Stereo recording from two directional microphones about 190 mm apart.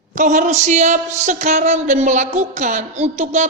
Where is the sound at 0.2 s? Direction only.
40° right (ahead or behind).